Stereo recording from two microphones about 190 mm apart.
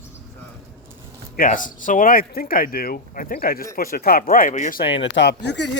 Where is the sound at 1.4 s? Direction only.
45° left (ahead or behind).